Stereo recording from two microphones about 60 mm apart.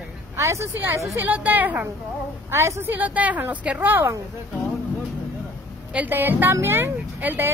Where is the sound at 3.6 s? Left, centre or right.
Centre.